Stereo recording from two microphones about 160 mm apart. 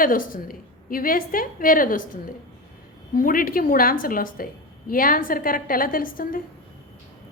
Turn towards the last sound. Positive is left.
turn(degrees=60)  # may be behind; listen again after turning